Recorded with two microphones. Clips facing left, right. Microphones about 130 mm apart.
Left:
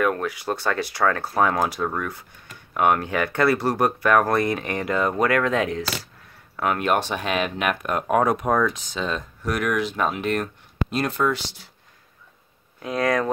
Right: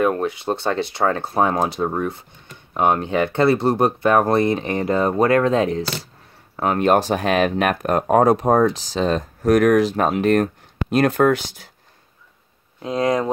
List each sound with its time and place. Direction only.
0.0 s speech: 25° right (ahead or behind); by 11.7 s 50° right (ahead or behind)
12.8 s speech: 25° right (ahead or behind)